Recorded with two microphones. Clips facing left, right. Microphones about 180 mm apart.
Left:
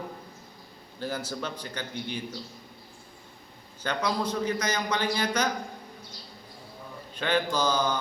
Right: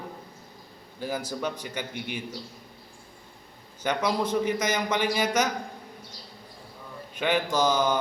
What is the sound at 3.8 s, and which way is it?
Speech, 25° right (ahead or behind).